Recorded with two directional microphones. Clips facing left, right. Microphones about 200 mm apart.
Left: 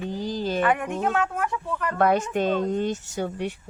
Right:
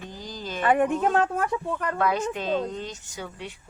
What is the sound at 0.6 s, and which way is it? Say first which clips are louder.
Speech: right 5 dB; 35° right (ahead or behind).